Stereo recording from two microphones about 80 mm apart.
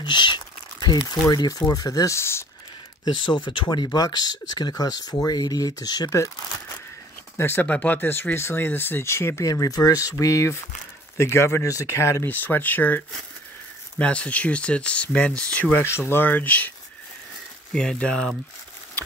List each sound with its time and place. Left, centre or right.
0.0 s crumpling: left
1.3 s speech: left
3.1 s speech: left
7.3 s speech: left
7.6 s speech: centre; by 9.5 s left
9.5 s speech: left
10.1 s speech: left
17.7 s speech: centre